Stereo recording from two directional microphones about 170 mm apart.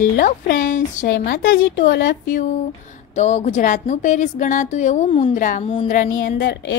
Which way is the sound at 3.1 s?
40° left (ahead or behind).